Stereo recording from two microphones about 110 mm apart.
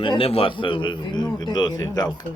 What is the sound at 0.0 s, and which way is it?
Speech, 55° left (ahead or behind).